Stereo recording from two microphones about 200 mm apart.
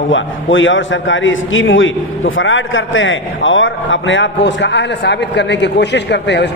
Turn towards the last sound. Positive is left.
turn(degrees=60)  # may be behind; listen again after turning